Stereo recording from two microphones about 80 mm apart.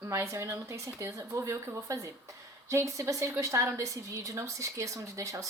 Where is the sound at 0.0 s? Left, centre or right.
Right.